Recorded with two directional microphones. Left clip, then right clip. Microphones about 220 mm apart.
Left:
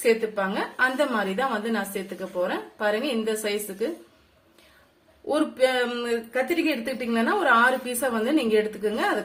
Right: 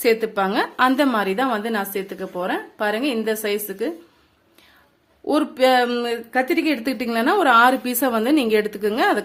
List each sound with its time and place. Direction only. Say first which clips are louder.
0.0 s a woman's voice: right 4 dB; 50° right (ahead or behind)
5.3 s a woman's voice: right 5 dB; 45° right (ahead or behind)